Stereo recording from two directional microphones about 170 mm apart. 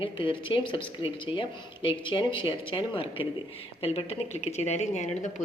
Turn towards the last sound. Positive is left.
turn(degrees=45)  # may be behind; listen again after turning